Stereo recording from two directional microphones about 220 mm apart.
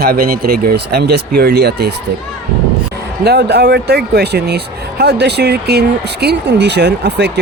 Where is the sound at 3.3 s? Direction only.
50° right (ahead or behind).